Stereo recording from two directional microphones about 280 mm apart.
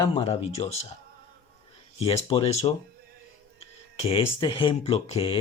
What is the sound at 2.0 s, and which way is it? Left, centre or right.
Speech, left.